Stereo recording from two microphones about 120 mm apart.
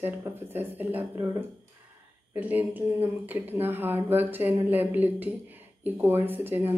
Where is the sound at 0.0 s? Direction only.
20° right (ahead or behind).